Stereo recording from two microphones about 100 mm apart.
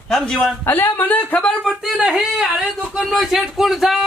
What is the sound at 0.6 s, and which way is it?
Speech, 20° left (ahead or behind).